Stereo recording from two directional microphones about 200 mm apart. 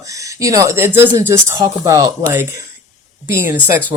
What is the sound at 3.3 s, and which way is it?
Speech, 10° right (ahead or behind).